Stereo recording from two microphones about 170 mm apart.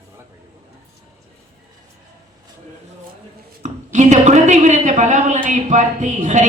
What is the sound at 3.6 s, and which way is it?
A woman's voice, 45° right (ahead or behind).